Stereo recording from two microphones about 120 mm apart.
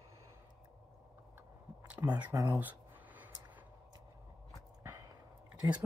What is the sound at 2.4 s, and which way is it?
Speech, 15° right (ahead or behind).